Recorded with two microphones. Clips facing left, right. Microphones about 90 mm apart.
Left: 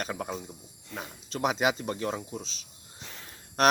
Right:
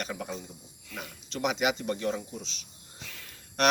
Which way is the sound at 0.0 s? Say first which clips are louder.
Left 2 dB; 40° left (ahead or behind).